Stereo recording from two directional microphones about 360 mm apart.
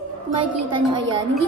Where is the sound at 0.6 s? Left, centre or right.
Right.